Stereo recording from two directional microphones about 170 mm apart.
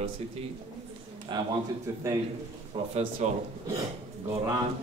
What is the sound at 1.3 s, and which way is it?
Speech, 25° right (ahead or behind).